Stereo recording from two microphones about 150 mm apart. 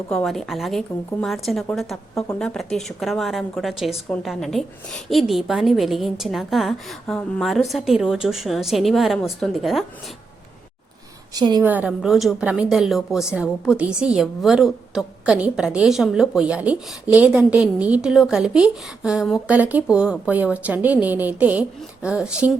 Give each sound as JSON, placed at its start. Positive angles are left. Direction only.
{"t": 0.1, "sound": "speech", "side_deg": 5}
{"t": 11.3, "sound": "a woman's voice", "side_deg": -25}
{"t": 11.6, "sound": "a woman's voice", "side_deg": -10}